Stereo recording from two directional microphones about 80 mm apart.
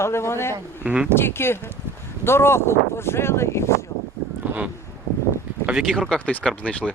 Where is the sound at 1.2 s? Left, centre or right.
Left.